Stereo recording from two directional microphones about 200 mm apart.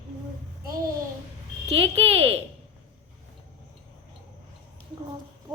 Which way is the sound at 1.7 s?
30° right (ahead or behind).